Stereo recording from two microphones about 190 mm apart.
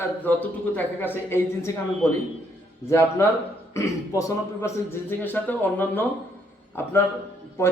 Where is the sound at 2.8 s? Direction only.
15° left (ahead or behind).